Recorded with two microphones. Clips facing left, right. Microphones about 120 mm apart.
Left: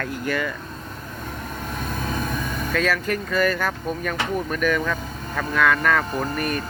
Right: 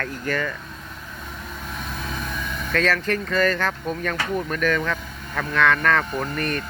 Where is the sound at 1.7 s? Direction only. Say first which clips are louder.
Left 4 dB; 45° left (ahead or behind).